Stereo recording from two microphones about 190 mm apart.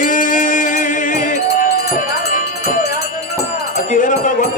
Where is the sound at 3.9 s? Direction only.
45° left (ahead or behind).